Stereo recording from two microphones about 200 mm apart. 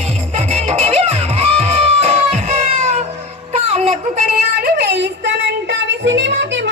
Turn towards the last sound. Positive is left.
turn(degrees=-65)  # may be behind; listen again after turning